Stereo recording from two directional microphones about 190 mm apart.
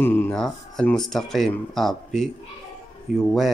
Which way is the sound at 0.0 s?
10° left (ahead or behind).